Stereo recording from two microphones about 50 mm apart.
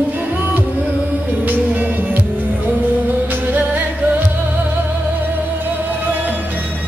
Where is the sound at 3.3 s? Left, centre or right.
Right.